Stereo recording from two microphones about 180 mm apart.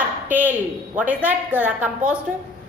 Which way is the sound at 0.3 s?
10° right (ahead or behind).